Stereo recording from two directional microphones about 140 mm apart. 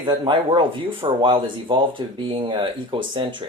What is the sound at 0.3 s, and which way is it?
Speech, 35° right (ahead or behind).